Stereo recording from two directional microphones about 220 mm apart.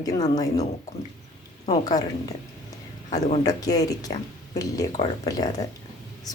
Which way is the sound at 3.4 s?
15° left (ahead or behind).